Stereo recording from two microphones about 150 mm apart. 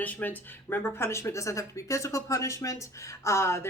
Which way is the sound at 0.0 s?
10° left (ahead or behind).